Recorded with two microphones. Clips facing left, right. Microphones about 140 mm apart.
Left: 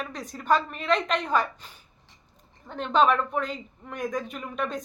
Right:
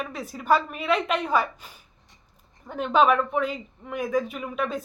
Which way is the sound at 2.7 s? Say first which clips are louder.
Right 2 dB; 10° right (ahead or behind).